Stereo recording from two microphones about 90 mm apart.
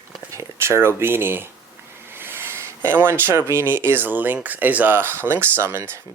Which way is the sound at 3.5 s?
25° right (ahead or behind).